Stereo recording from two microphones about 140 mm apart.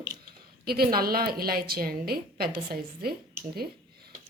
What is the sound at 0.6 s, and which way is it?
A woman's voice, 90° right.